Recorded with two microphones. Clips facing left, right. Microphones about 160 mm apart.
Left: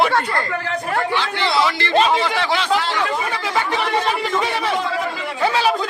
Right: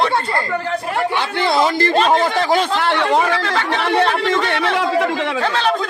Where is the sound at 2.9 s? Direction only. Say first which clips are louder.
Right 6 dB; 70° right (ahead or behind).